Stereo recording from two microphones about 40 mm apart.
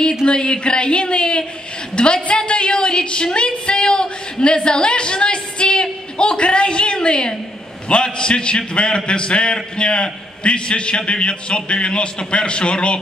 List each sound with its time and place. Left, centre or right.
0.2 s a man's voice: left